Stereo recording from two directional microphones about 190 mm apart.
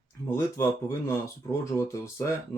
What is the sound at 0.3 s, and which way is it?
Speech, 15° left (ahead or behind).